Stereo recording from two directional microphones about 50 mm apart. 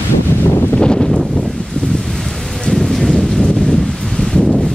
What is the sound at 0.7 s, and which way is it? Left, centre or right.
Wind noise, centre.